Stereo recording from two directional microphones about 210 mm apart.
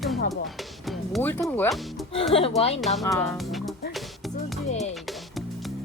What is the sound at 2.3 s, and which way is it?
Speech, 25° left (ahead or behind).